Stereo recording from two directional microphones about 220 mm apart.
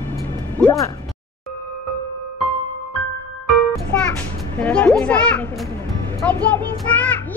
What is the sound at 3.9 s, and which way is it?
Children playing, 5° left (ahead or behind).